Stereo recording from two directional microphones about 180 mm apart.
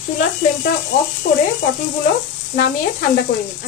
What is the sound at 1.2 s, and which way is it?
Speech, 65° left (ahead or behind).